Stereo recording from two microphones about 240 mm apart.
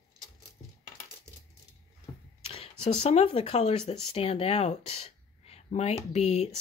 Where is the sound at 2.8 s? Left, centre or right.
Left.